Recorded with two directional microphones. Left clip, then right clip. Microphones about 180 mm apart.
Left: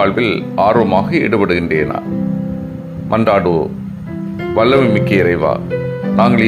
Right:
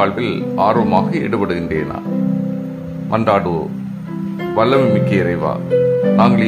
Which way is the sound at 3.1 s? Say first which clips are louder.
Left 3 dB; 15° left (ahead or behind).